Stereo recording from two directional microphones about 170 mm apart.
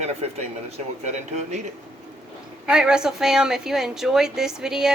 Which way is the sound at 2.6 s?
5° right (ahead or behind).